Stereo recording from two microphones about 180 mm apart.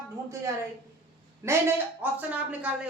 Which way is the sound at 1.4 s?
15° right (ahead or behind).